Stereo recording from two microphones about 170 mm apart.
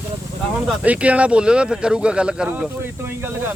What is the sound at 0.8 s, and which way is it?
Speech, 5° right (ahead or behind).